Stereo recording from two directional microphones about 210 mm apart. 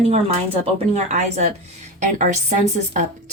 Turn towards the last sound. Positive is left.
turn(degrees=-35)  # may be behind; listen again after turning